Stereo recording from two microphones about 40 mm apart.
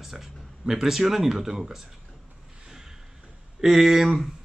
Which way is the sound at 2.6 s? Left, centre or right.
Centre.